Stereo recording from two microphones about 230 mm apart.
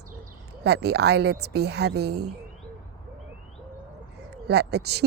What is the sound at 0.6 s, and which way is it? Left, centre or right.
A woman's voice, right.